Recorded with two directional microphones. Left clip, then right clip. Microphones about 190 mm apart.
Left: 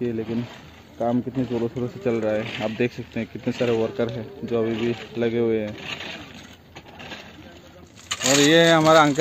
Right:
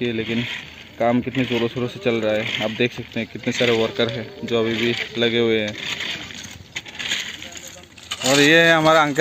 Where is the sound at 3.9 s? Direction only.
Centre (ahead or behind).